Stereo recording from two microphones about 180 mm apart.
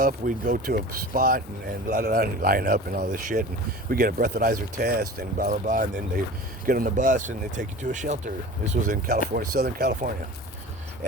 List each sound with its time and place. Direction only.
0.0 s speech: 50° right (ahead or behind)